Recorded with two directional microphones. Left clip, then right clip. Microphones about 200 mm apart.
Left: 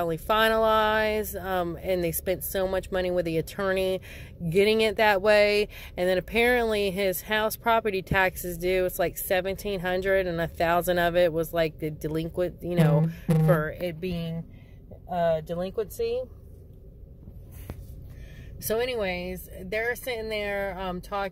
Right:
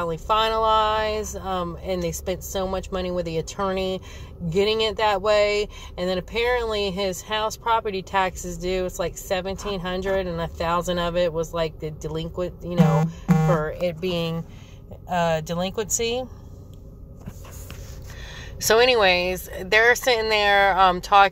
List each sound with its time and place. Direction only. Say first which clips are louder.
0.1 s speech: right 2 dB; 50° left (ahead or behind)
13.7 s speech: right 6 dB; 30° left (ahead or behind)
15.0 s speech: right 3 dB; 10° right (ahead or behind)
18.3 s speech: right 10 dB; 10° left (ahead or behind)